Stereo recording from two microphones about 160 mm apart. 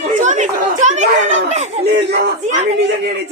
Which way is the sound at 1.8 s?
90° right.